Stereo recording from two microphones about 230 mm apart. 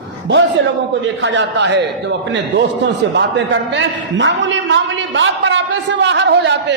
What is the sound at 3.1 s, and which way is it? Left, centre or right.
A man's voice, right.